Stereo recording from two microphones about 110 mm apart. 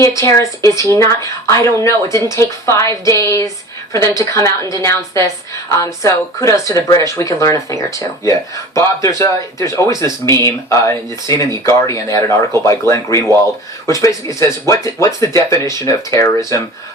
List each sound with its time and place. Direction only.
0.2 s speech: 30° left (ahead or behind)